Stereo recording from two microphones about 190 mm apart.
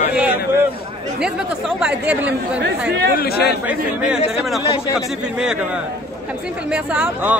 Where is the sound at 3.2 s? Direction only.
55° left (ahead or behind).